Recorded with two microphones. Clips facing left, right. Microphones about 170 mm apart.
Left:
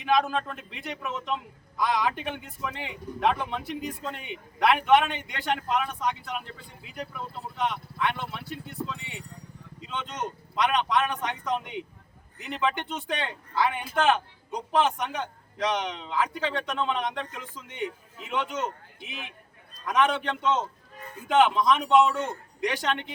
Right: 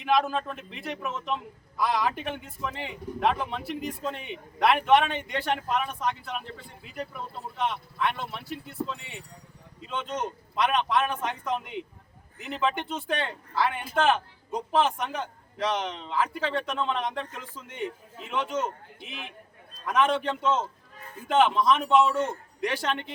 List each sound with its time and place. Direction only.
0.0 s a man's voice: 5° right (ahead or behind)
7.6 s a man's voice: 5° right (ahead or behind)